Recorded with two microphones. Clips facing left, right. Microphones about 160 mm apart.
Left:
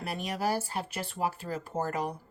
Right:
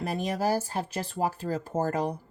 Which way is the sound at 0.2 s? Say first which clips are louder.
Right 3 dB; 40° right (ahead or behind).